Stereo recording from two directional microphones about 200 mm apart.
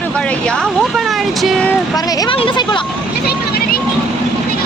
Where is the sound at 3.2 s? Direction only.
50° left (ahead or behind).